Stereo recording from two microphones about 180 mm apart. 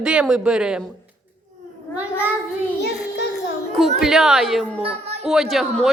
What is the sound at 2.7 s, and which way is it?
Child singing, 65° left (ahead or behind).